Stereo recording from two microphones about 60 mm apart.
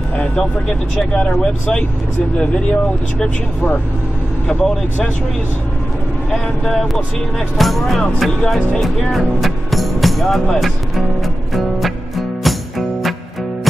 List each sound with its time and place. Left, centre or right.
0.2 s speech: centre
4.5 s speech: centre
6.3 s speech: centre
11.5 s music: centre